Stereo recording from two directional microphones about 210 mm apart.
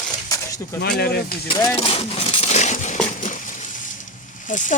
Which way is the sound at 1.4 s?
20° left (ahead or behind).